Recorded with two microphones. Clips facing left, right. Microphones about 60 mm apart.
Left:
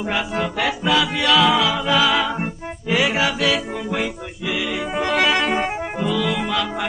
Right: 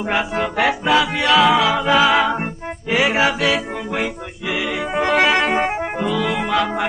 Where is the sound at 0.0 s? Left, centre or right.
Right.